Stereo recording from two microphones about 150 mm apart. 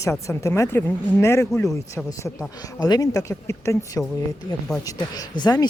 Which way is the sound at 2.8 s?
25° left (ahead or behind).